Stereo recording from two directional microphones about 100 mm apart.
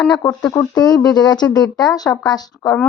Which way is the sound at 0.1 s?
40° left (ahead or behind).